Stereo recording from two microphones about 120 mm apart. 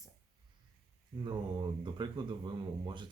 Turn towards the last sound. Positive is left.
turn(degrees=-40)  # may be behind; listen again after turning